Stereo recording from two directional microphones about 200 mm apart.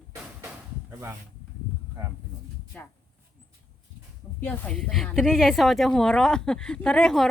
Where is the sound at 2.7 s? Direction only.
5° left (ahead or behind).